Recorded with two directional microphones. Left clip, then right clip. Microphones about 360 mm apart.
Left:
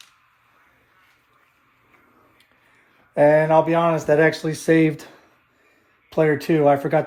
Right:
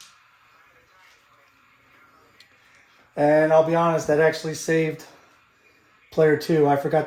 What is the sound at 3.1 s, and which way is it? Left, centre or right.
Speech, left.